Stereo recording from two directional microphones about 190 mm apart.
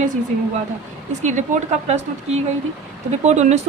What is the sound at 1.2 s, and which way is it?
Speech, 40° right (ahead or behind).